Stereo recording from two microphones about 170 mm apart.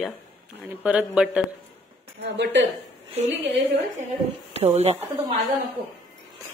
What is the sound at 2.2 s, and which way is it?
Speech, 90° right.